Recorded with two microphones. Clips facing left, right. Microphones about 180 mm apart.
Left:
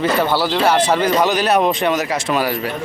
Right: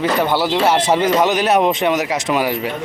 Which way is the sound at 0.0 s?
15° right (ahead or behind).